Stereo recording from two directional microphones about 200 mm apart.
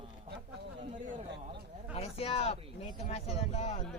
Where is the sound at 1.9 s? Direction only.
30° left (ahead or behind).